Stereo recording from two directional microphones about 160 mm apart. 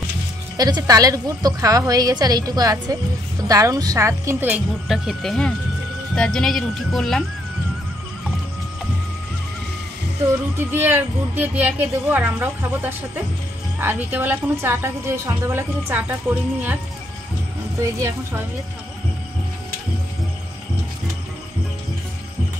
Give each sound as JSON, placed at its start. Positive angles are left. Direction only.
{"t": 0.6, "sound": "a woman's voice", "side_deg": -25}
{"t": 4.8, "sound": "speech", "side_deg": 0}
{"t": 10.7, "sound": "a woman's voice", "side_deg": -15}
{"t": 17.7, "sound": "a woman's voice", "side_deg": -20}